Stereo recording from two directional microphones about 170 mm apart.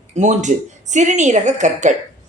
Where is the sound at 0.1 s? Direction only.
45° right (ahead or behind).